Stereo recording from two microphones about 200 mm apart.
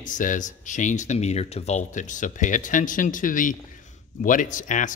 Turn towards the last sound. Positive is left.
turn(degrees=40)  # may be behind; listen again after turning